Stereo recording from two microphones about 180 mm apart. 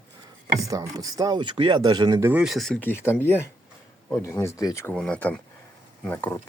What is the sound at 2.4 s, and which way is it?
Speech, centre (ahead or behind).